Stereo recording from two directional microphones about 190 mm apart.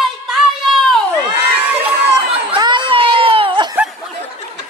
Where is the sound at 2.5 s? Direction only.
25° right (ahead or behind).